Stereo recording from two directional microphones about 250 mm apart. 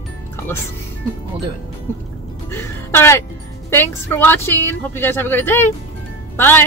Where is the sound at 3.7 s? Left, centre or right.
Centre.